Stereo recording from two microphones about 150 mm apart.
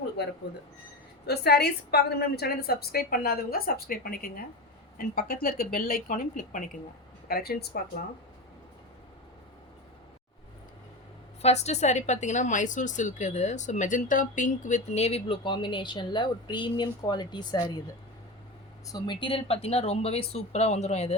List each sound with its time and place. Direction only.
0.2 s a woman's voice: 90° left; by 6.7 s 60° left (ahead or behind)
7.3 s a woman's voice: 90° left
11.4 s a woman's voice: 45° left (ahead or behind); by 17.8 s 30° left (ahead or behind)
18.9 s a woman's voice: 30° left (ahead or behind); by 21.2 s 45° left (ahead or behind)